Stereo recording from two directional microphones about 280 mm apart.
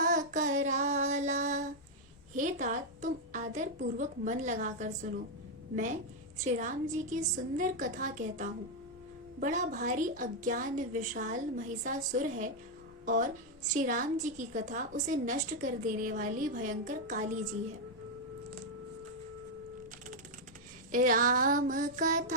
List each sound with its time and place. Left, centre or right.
0.0 s child singing: right
2.3 s a woman's voice: right
20.9 s a woman's voice: right